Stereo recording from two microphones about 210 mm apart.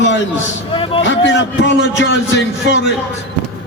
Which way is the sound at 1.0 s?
60° left (ahead or behind).